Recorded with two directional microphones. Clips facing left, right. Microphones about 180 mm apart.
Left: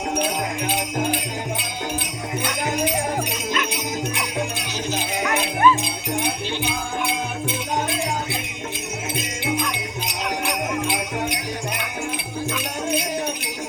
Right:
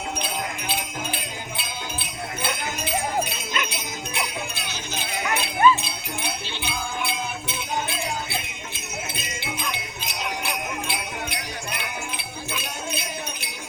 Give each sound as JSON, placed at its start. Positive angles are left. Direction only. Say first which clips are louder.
{"t": 2.4, "sound": "music", "louder": "left 7 dB", "side_deg": 15}
{"t": 4.5, "sound": "music", "louder": "left 7 dB", "side_deg": 15}
{"t": 9.1, "sound": "music", "louder": "left 8 dB", "side_deg": 15}
{"t": 12.9, "sound": "jingle bell", "louder": "left 11 dB", "side_deg": 15}